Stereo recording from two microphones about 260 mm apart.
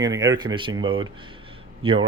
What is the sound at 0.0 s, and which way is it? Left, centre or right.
Speech, centre.